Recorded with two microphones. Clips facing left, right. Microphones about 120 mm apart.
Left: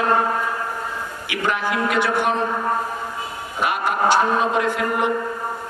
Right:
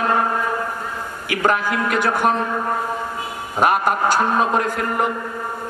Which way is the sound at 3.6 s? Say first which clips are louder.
Right 3 dB; 45° right (ahead or behind).